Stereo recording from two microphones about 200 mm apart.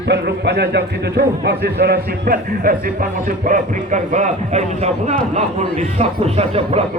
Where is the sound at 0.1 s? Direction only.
55° right (ahead or behind); by 4.6 s 35° right (ahead or behind).